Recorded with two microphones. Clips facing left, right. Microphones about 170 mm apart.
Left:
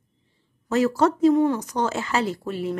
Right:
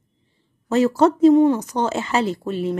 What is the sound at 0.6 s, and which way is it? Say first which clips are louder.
A woman's voice: right 4 dB; 25° right (ahead or behind).